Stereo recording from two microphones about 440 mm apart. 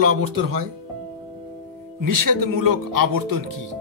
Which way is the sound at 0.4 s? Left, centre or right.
Right.